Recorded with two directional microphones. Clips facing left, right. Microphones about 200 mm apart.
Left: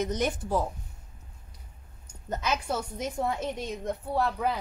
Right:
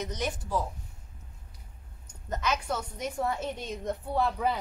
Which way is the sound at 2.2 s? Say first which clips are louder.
Left 1 dB; 25° left (ahead or behind).